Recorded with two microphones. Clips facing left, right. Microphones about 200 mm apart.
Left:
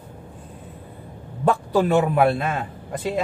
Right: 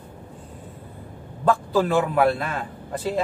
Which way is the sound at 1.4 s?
20° left (ahead or behind).